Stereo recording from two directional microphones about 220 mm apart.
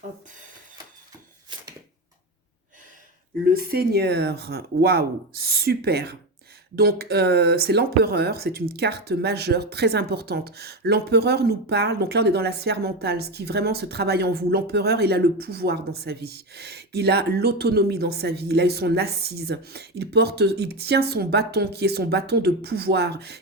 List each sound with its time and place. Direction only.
3.5 s speech: 45° right (ahead or behind)